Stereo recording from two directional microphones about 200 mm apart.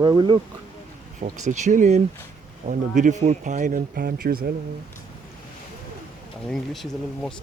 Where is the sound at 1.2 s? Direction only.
35° right (ahead or behind).